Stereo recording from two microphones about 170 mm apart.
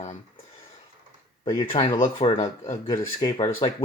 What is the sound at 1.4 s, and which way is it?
Speech, 30° left (ahead or behind).